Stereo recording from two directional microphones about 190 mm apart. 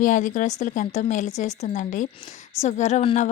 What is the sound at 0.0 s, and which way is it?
A woman's voice, 40° left (ahead or behind).